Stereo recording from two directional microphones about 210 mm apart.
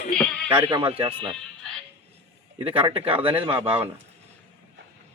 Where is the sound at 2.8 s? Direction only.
25° right (ahead or behind).